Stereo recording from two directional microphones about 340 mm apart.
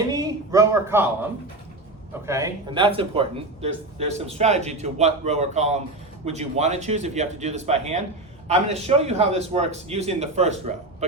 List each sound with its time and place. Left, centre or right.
0.1 s a man's voice: centre